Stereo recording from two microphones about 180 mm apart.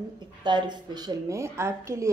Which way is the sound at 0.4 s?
25° right (ahead or behind).